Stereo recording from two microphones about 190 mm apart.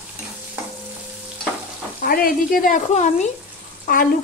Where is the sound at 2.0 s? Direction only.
50° left (ahead or behind).